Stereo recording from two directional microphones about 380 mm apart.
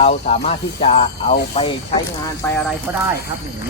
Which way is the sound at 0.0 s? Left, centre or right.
Centre.